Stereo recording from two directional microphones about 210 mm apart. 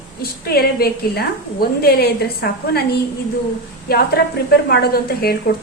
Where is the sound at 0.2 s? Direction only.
45° left (ahead or behind).